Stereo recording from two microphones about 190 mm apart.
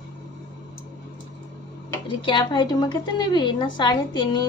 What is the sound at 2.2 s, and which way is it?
A woman's voice, 25° left (ahead or behind).